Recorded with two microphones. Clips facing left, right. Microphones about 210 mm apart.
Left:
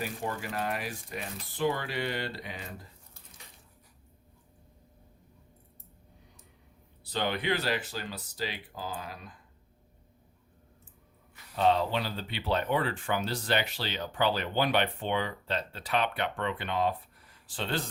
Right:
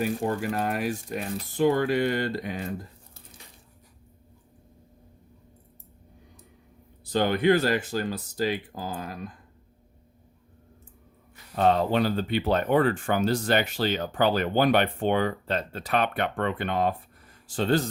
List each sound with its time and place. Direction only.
0.0 s speech: 50° right (ahead or behind)
7.0 s speech: 45° right (ahead or behind)
11.5 s speech: 50° right (ahead or behind)